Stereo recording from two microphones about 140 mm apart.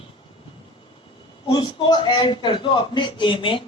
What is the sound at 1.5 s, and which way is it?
A man's voice, 30° left (ahead or behind).